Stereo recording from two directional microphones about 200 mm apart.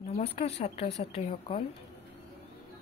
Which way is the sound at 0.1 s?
30° left (ahead or behind).